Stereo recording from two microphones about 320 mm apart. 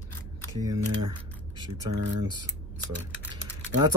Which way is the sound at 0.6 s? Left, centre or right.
Centre.